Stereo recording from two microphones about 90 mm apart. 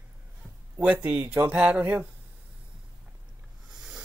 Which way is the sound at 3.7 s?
10° right (ahead or behind).